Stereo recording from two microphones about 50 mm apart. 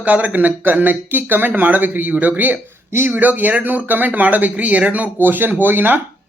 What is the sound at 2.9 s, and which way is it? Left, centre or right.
Speech, right.